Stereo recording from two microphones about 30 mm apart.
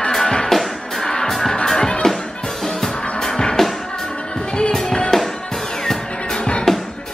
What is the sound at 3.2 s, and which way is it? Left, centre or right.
Music, left.